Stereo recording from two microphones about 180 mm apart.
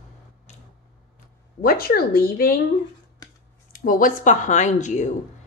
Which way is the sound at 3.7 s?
50° left (ahead or behind).